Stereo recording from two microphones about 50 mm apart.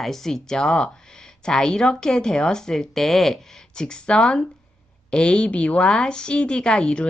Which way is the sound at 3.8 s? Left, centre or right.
Centre.